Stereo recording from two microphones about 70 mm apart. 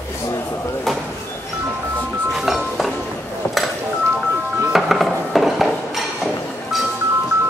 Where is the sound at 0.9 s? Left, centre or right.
Centre.